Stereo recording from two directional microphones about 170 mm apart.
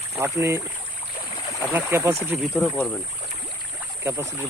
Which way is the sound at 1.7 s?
15° right (ahead or behind).